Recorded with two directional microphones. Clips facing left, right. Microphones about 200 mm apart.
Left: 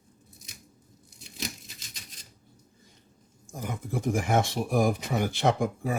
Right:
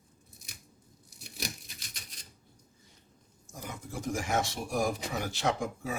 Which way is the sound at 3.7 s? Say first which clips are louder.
Left 6 dB; 55° left (ahead or behind).